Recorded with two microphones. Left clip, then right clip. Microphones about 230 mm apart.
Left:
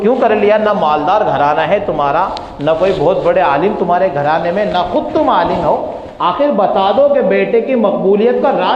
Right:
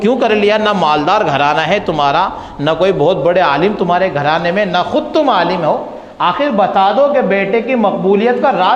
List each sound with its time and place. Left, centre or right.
0.0 s a man's voice: right